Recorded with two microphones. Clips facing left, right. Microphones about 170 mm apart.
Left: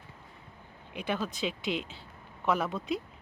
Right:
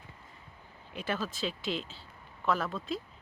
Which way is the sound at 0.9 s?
15° left (ahead or behind).